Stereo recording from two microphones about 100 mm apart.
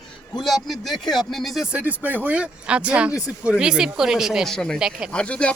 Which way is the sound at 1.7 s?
15° right (ahead or behind).